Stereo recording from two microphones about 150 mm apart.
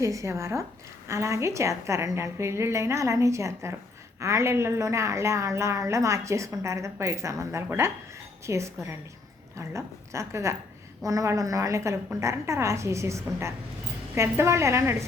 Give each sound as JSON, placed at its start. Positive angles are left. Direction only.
{"t": 0.0, "sound": "a woman's voice", "side_deg": -20}